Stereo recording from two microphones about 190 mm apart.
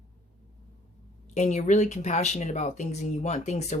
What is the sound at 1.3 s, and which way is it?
Speech, 40° left (ahead or behind).